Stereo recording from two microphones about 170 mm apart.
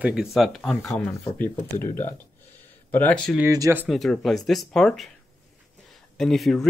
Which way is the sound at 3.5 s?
20° right (ahead or behind).